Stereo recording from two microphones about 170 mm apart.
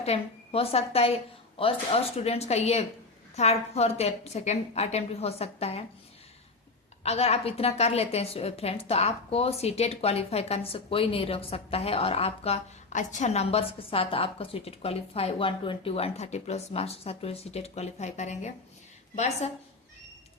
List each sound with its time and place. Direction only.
0.0 s a woman's voice: 35° left (ahead or behind)
7.0 s a woman's voice: 35° left (ahead or behind)